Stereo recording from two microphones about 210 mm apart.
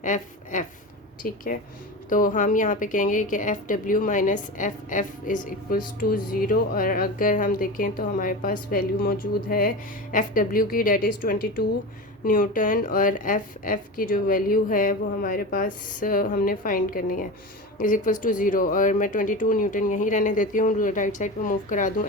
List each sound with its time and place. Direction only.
0.0 s a woman's voice: 35° left (ahead or behind)